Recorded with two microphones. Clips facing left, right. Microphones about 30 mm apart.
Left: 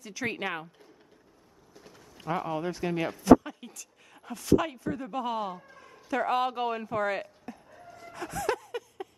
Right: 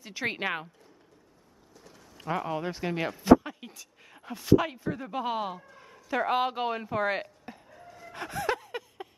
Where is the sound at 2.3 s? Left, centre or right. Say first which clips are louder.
Even; centre.